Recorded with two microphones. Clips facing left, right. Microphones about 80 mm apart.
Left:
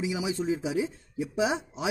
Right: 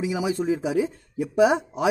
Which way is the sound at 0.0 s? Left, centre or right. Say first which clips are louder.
Right 5 dB; right.